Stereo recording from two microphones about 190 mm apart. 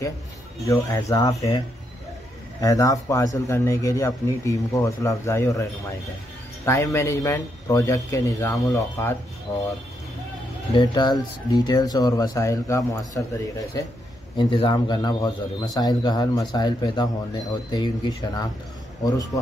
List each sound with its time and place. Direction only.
0.7 s a man's voice: 15° left (ahead or behind)
2.6 s a man's voice: 15° left (ahead or behind)
10.7 s a man's voice: 25° left (ahead or behind)
14.3 s a man's voice: 25° left (ahead or behind)